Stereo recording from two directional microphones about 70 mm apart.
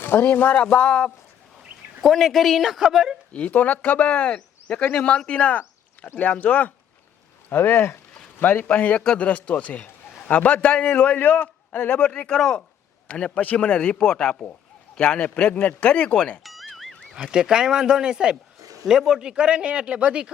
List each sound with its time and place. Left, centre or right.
0.0 s a man's voice: left; by 1.1 s centre
2.0 s a man's voice: centre
3.3 s a man's voice: left
16.4 s music: centre
17.2 s speech: centre
18.6 s a sound: right
18.9 s speech: centre